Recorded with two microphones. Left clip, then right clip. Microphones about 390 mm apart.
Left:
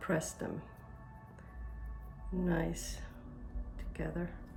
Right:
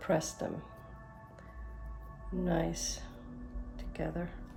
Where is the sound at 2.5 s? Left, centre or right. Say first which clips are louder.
Right 3 dB; centre.